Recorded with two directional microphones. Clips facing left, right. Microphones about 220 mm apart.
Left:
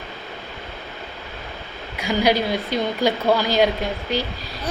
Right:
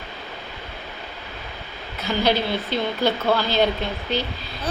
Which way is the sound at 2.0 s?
10° left (ahead or behind).